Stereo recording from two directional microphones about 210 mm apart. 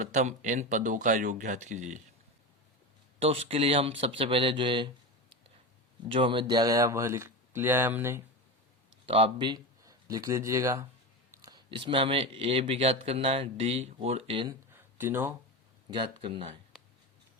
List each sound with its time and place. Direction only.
0.0 s speech: 35° right (ahead or behind)
3.2 s speech: 30° right (ahead or behind)
6.1 s speech: 25° right (ahead or behind)
9.0 s speech: 25° right (ahead or behind)
14.7 s a sound: 10° right (ahead or behind)
15.9 s speech: 20° right (ahead or behind)